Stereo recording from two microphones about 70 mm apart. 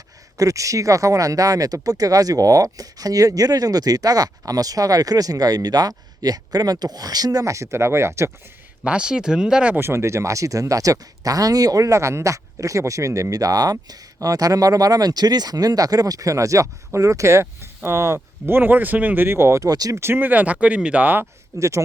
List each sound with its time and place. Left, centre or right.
0.3 s speech: right
8.8 s speech: centre
9.7 s speech: right
13.3 s speech: right
18.5 s speech: right
19.6 s speech: right
20.0 s speech: right
21.5 s speech: right